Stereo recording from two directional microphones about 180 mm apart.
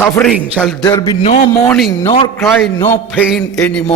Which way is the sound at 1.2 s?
35° left (ahead or behind).